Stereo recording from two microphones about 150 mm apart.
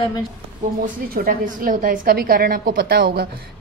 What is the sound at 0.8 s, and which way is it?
A woman's voice, 75° right (ahead or behind).